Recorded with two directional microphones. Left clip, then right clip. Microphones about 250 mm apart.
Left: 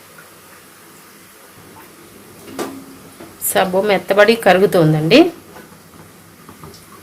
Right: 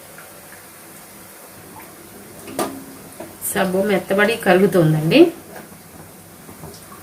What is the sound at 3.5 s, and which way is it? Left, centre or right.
Speech, left.